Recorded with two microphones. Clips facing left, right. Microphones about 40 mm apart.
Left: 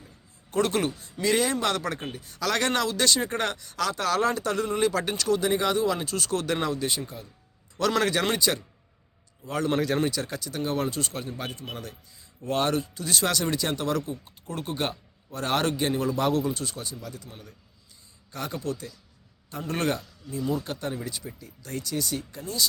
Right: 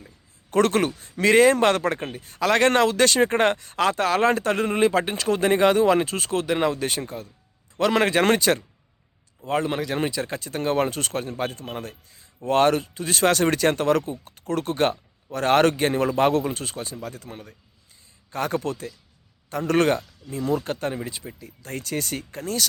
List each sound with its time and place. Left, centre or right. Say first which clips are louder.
0.5 s speech: right 5 dB; right
0.9 s speech: right 6 dB; right
5.4 s speech: right 6 dB; right
6.4 s a man's voice: right 8 dB; centre
6.7 s speech: right 4 dB; right
7.8 s a man's voice: right 4 dB; right
8.2 s speech: right 6 dB; right
9.7 s speech: left 1 dB; centre
10.0 s speech: right 2 dB; right
12.9 s speech: right 6 dB; right
14.3 s speech: right 7 dB; right
19.5 s speech: right 8 dB; right
20.6 s speech: right 4 dB; right
21.0 s speech: right 2 dB; right